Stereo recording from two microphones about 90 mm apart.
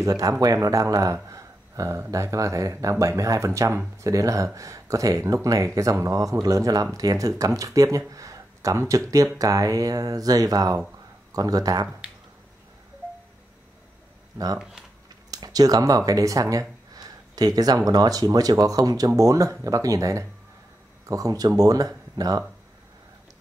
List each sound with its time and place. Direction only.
0.0 s speech: 40° right (ahead or behind)
8.1 s a sound: 40° right (ahead or behind)
9.1 s speech: 40° right (ahead or behind)
14.6 s speech: 5° right (ahead or behind)
15.3 s speech: 45° right (ahead or behind)